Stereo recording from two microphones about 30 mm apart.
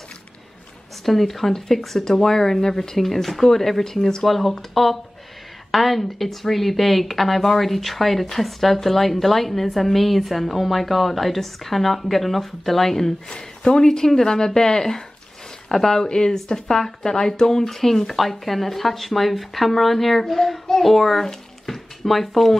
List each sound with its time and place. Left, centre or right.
1.0 s speech: centre
13.3 s speech: left
16.0 s speech: left; by 21.3 s centre
21.6 s a sound: centre